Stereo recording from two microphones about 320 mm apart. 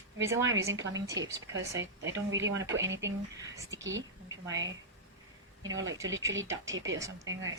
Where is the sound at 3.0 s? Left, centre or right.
Centre.